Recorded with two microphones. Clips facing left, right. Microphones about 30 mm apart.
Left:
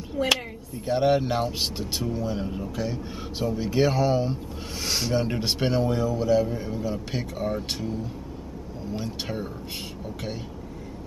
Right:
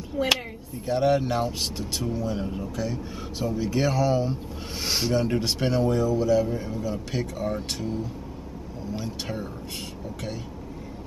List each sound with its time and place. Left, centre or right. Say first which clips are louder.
0.1 s speech: even; centre
0.8 s speech: left 1 dB; centre
2.7 s speech: even; centre
4.8 s speech: right 1 dB; centre
5.1 s speech: right 1 dB; centre
9.0 s speech: left 2 dB; centre